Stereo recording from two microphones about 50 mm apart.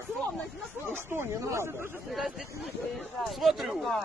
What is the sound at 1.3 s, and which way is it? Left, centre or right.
Speech, right.